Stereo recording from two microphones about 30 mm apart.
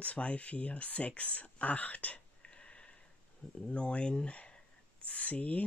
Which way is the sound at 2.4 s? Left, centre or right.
Left.